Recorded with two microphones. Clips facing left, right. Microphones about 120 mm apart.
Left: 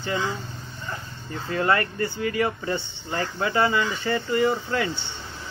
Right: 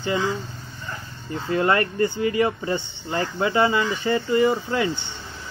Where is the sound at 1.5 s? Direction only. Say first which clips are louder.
Right 2 dB; 25° right (ahead or behind).